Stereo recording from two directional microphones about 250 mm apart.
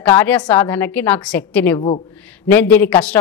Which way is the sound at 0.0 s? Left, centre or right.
Centre.